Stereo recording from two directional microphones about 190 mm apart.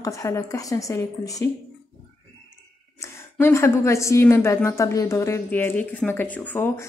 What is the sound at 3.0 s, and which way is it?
A woman's voice, 15° left (ahead or behind).